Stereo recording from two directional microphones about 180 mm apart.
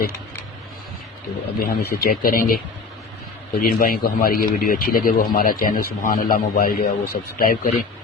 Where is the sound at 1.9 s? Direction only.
55° left (ahead or behind).